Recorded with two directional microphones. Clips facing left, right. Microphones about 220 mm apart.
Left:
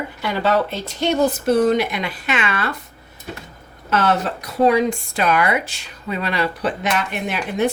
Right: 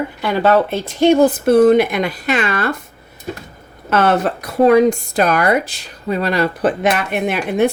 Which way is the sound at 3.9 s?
55° right (ahead or behind).